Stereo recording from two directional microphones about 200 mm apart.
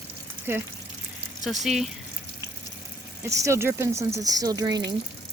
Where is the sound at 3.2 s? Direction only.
15° right (ahead or behind).